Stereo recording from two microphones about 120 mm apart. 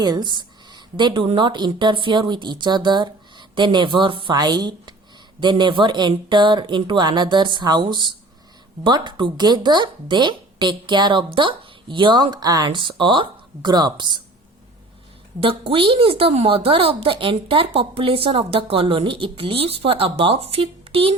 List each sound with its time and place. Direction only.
0.0 s speech: 35° right (ahead or behind)
15.4 s a woman's voice: 50° right (ahead or behind)